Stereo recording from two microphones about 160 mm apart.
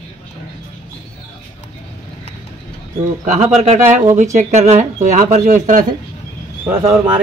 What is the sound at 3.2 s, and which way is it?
Speech, 50° right (ahead or behind).